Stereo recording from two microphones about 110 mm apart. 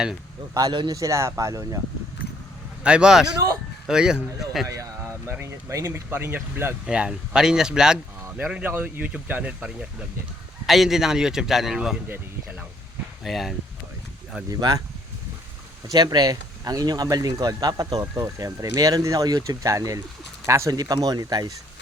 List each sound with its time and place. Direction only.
0.5 s speech: 40° right (ahead or behind)
0.9 s speech: 30° right (ahead or behind)
2.8 s speech: 10° right (ahead or behind)
4.7 s speech: 30° right (ahead or behind)
6.8 s a man's voice: 10° right (ahead or behind)
12.0 s speech: 15° right (ahead or behind)
13.2 s a man's voice: centre (ahead or behind)
15.9 s speech: 35° right (ahead or behind)